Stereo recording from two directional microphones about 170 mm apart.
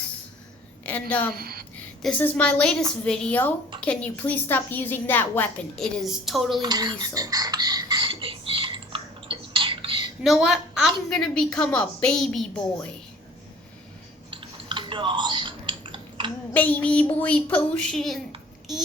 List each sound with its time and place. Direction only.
0.9 s a woman's voice: 10° left (ahead or behind)
1.4 s speech: 65° right (ahead or behind)
2.0 s a woman's voice: 5° left (ahead or behind)
6.6 s a sound: 25° right (ahead or behind)
10.2 s a woman's voice: centre (ahead or behind)
14.4 s typing: 30° right (ahead or behind)
16.6 s a woman's voice: 10° left (ahead or behind)